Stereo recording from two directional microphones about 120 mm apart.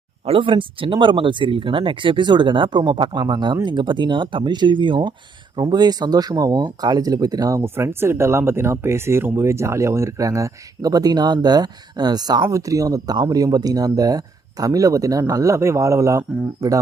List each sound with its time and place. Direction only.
0.3 s speech: 45° right (ahead or behind); by 16.8 s 25° right (ahead or behind)